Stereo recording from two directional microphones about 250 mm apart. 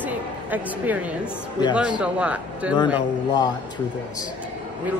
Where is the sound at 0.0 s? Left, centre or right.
Centre.